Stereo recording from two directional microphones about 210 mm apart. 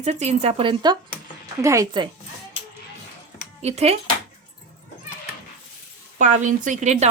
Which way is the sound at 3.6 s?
30° right (ahead or behind).